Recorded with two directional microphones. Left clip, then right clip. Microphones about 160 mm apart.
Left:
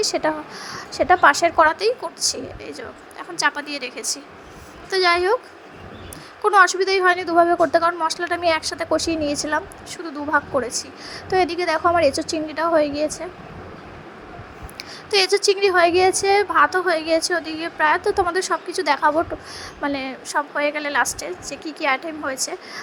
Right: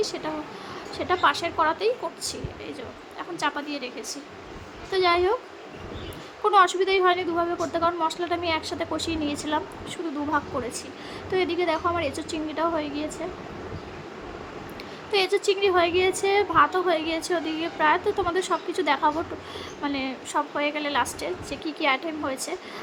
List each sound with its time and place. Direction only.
0.0 s a woman's voice: 50° left (ahead or behind)
0.7 s a woman's voice: 40° left (ahead or behind)
6.4 s a woman's voice: 40° left (ahead or behind)
11.3 s a woman's voice: 40° left (ahead or behind)
15.1 s a woman's voice: 45° left (ahead or behind); by 22.8 s 30° left (ahead or behind)